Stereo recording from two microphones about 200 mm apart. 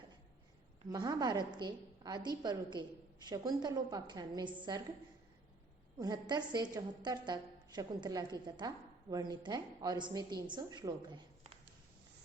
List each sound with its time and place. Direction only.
0.9 s a woman's voice: 20° right (ahead or behind)
6.0 s a woman's voice: 20° right (ahead or behind)